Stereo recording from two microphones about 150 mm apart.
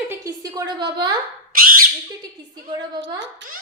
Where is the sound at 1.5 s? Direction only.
70° right (ahead or behind).